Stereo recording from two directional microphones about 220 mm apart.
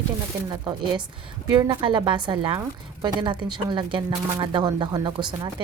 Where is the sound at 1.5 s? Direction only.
20° right (ahead or behind).